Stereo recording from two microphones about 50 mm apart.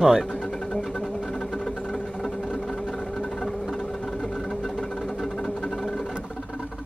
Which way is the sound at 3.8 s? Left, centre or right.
Centre.